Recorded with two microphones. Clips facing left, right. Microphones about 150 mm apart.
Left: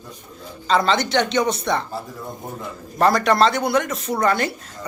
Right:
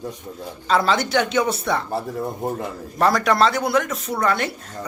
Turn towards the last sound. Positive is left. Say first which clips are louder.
# left 2 dB
turn(degrees=0)  # may be behind; listen again after turning